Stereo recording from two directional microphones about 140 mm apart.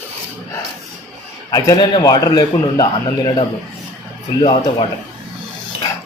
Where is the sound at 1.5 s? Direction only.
25° left (ahead or behind).